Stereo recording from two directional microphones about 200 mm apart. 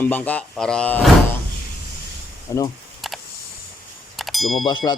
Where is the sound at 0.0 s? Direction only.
10° left (ahead or behind).